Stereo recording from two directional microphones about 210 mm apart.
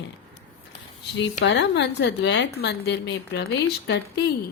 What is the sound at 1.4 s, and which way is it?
A woman's voice, 55° left (ahead or behind).